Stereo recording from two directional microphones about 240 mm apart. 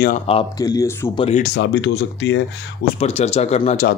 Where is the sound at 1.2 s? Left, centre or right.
Left.